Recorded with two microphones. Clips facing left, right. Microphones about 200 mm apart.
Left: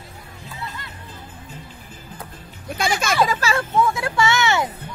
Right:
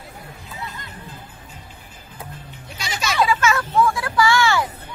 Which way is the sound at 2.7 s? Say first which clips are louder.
Left 6 dB; 50° left (ahead or behind).